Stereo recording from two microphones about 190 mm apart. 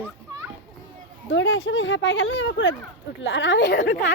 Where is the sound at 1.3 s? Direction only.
85° left.